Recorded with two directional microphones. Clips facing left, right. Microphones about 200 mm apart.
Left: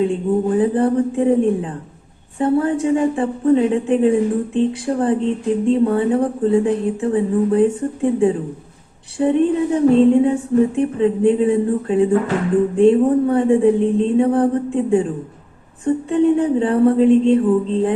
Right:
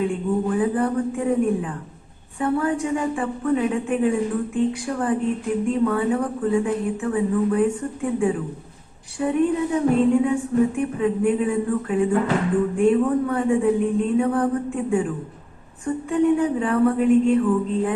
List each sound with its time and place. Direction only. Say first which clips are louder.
0.0 s a woman's voice: left 5 dB; 25° left (ahead or behind)